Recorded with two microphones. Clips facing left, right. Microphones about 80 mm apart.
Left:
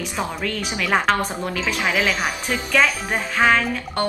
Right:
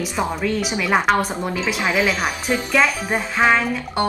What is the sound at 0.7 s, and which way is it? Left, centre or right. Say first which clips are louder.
Speech: even; centre.